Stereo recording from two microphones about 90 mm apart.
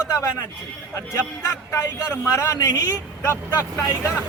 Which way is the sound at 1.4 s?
35° left (ahead or behind).